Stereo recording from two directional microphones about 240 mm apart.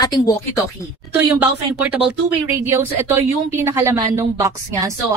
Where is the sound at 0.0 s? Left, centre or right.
Centre.